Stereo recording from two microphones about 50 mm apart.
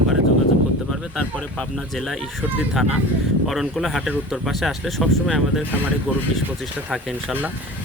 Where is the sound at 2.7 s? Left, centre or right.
Centre.